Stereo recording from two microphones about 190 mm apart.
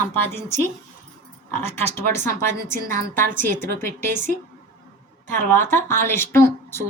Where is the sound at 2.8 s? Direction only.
50° right (ahead or behind).